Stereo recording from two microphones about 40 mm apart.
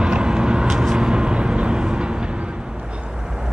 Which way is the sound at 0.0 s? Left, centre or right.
Right.